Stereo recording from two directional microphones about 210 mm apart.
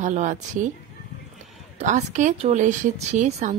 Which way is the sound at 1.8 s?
35° right (ahead or behind).